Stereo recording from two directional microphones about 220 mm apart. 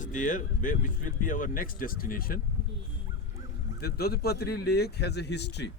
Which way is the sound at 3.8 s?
45° left (ahead or behind).